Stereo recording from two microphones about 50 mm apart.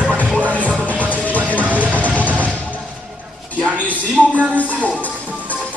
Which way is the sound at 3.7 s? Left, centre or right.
Left.